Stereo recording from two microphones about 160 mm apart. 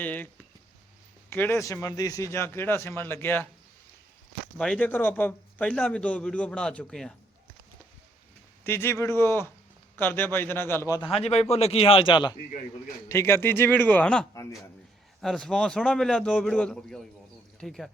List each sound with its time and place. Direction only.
0.0 s a man's voice: 10° left (ahead or behind)
1.3 s a man's voice: 15° left (ahead or behind)
4.5 s a man's voice: 5° left (ahead or behind)
8.6 s a man's voice: 15° left (ahead or behind)
11.1 s a man's voice: 40° left (ahead or behind)
12.4 s a man's voice: 55° left (ahead or behind)
13.1 s a man's voice: 15° left (ahead or behind)